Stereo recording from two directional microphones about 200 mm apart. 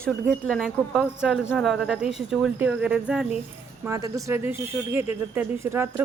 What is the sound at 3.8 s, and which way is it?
A woman's voice, 15° right (ahead or behind).